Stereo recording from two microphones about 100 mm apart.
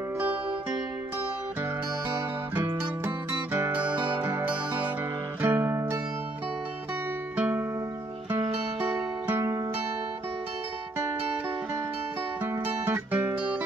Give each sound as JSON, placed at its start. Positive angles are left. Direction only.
{"t": 3.6, "sound": "music", "side_deg": -20}
{"t": 7.3, "sound": "music", "side_deg": -15}
{"t": 8.9, "sound": "music", "side_deg": -25}
{"t": 12.4, "sound": "music", "side_deg": -20}